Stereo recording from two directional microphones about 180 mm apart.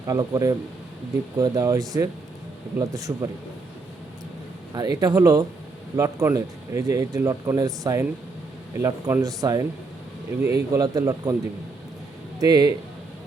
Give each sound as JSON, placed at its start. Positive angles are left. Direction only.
{"t": 0.1, "sound": "speech", "side_deg": -20}
{"t": 4.7, "sound": "speech", "side_deg": -20}
{"t": 12.4, "sound": "speech", "side_deg": -20}